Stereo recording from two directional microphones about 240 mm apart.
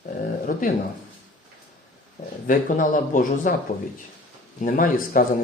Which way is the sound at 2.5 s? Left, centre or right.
Left.